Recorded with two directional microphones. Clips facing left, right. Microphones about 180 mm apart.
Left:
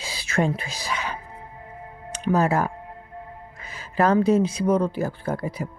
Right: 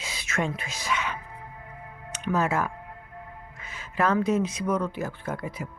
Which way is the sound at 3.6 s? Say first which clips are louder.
Left 5 dB; 35° left (ahead or behind).